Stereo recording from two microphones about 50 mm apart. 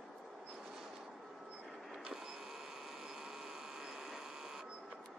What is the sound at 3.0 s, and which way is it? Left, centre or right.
Printer, centre.